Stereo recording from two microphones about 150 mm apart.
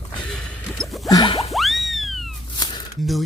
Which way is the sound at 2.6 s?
30° left (ahead or behind).